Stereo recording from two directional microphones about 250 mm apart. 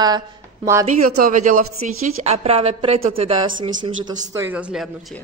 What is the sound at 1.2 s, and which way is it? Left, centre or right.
Speech, right.